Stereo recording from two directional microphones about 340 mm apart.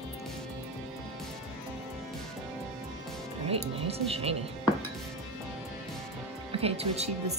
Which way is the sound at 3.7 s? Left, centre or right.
Centre.